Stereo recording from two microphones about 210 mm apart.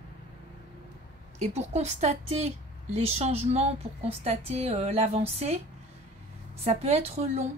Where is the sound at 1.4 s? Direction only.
30° right (ahead or behind).